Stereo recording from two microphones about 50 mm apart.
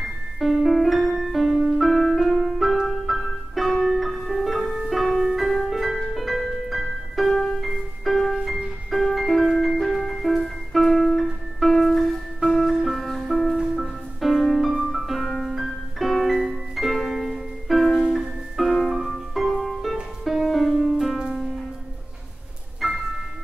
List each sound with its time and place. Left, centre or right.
0.4 s piano: centre
2.9 s music: centre
12.4 s music: right
12.7 s music: centre
22.8 s music: centre